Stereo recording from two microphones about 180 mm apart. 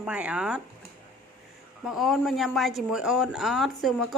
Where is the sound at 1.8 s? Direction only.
Centre (ahead or behind).